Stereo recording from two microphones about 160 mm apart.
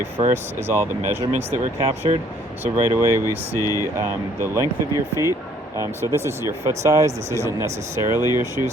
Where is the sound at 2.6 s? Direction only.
15° right (ahead or behind).